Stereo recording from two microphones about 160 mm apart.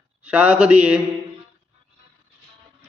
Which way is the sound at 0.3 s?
10° right (ahead or behind).